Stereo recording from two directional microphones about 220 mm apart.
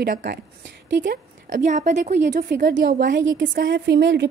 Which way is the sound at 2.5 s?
45° right (ahead or behind).